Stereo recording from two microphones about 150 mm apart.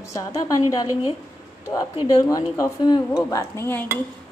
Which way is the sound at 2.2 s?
20° left (ahead or behind).